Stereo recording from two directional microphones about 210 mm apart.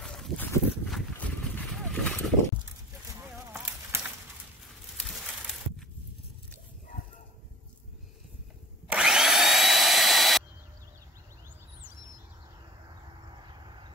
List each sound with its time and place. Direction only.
0.0 s a sound: centre (ahead or behind)
0.7 s dog: centre (ahead or behind)
3.3 s clip-clop: 10° right (ahead or behind)
4.9 s crushing: centre (ahead or behind)
8.8 s drill: 5° right (ahead or behind)
13.3 s a sound: 20° right (ahead or behind)